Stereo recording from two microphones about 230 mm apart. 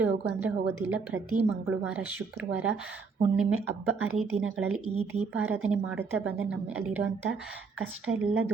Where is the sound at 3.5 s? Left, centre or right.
Right.